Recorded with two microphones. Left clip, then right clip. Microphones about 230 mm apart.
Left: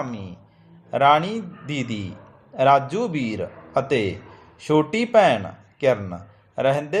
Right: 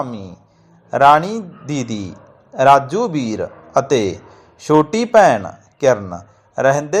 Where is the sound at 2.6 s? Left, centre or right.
Centre.